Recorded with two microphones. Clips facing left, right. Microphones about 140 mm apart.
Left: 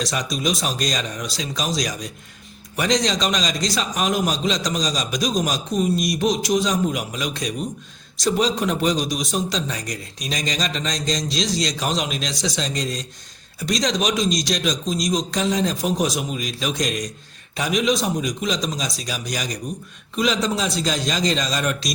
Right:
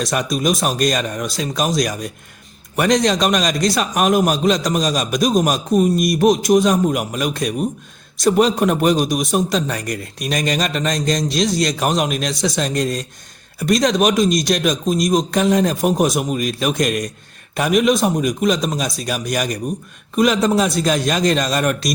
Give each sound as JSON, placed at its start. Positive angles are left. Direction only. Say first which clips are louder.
{"t": 0.0, "sound": "a man's voice", "louder": "right 5 dB", "side_deg": -55}